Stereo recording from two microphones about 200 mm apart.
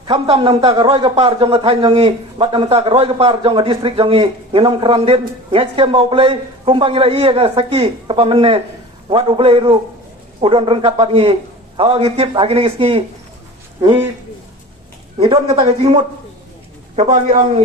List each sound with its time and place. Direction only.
0.0 s a man's voice: 25° right (ahead or behind)
15.2 s a man's voice: 30° right (ahead or behind)